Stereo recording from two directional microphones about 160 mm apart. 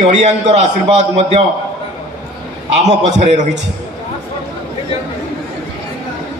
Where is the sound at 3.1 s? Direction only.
45° right (ahead or behind).